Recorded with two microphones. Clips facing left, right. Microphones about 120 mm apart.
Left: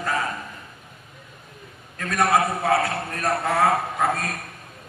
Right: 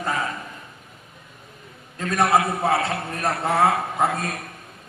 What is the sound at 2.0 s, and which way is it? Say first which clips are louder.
A man's voice: right 1 dB; 25° right (ahead or behind).